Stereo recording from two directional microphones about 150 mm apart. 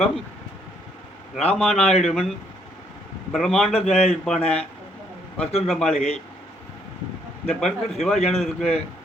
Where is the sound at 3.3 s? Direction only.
Centre (ahead or behind).